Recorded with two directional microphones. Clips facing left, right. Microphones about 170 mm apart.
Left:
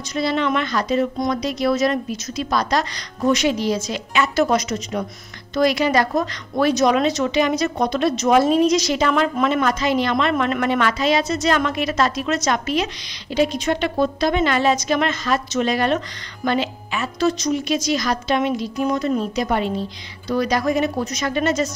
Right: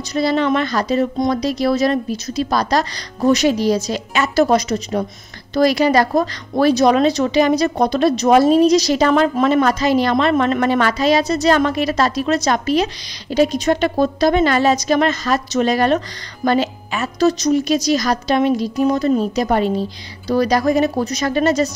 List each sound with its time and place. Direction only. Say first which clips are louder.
0.1 s speech: right 4 dB; 35° right (ahead or behind)